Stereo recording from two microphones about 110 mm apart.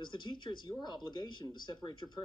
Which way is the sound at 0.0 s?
45° left (ahead or behind).